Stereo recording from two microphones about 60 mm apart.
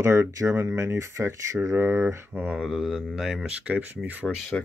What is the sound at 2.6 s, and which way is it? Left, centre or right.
Speech, centre.